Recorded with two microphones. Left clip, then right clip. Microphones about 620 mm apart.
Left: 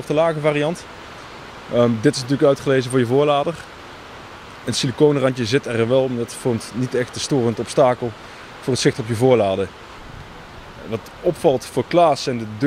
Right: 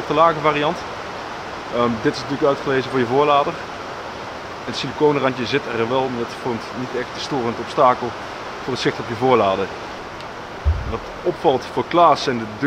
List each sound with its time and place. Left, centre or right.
0.1 s speech: left
1.8 s speech: left
4.6 s speech: left
11.4 s speech: centre